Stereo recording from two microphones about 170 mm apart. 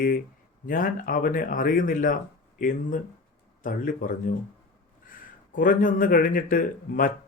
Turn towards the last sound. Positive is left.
turn(degrees=55)  # may be behind; listen again after turning